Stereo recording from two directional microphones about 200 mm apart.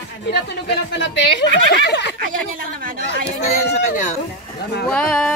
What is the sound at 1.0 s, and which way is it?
A woman's voice, 65° left (ahead or behind).